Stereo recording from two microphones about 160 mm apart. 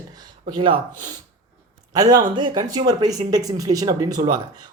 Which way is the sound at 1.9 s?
25° right (ahead or behind).